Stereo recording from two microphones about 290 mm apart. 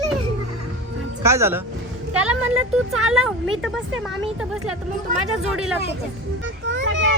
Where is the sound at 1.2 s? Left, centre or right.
Centre.